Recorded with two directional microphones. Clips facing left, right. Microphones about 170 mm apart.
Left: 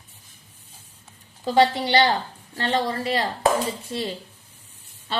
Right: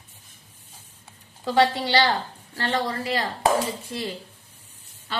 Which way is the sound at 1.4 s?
20° left (ahead or behind).